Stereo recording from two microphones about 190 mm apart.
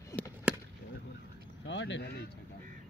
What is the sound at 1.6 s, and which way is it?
Speech, 70° left (ahead or behind).